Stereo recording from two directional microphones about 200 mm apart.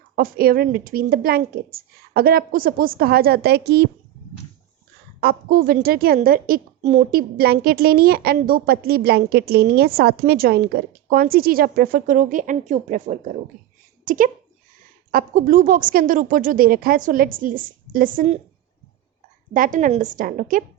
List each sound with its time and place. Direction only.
0.2 s a woman's voice: 50° right (ahead or behind)
5.2 s a woman's voice: 50° right (ahead or behind)
19.5 s a woman's voice: 40° right (ahead or behind)